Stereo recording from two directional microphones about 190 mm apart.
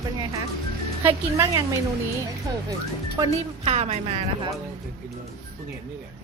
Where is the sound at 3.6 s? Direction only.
35° right (ahead or behind).